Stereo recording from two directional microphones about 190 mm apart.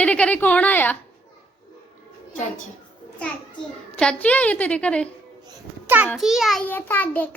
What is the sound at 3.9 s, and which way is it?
A child's voice, 5° left (ahead or behind).